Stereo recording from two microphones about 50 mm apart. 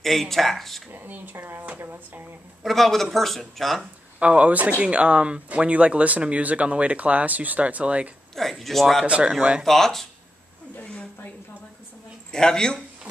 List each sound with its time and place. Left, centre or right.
0.0 s speech: centre
0.9 s speech: right
2.6 s speech: centre
4.2 s speech: right
8.4 s speech: centre
9.0 s speech: right
9.6 s speech: centre
10.8 s a sound: left
12.3 s speech: centre